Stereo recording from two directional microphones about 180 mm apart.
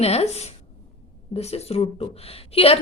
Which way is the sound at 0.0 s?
35° left (ahead or behind).